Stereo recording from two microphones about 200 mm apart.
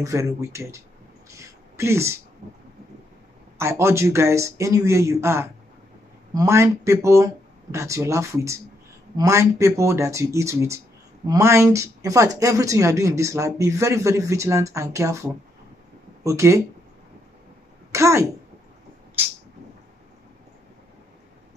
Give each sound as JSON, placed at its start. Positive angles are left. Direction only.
{"t": 0.0, "sound": "speech", "side_deg": -15}
{"t": 3.5, "sound": "speech", "side_deg": -15}
{"t": 16.3, "sound": "speech", "side_deg": -15}
{"t": 17.9, "sound": "speech", "side_deg": -15}